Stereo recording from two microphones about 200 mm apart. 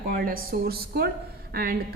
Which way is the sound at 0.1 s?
50° right (ahead or behind).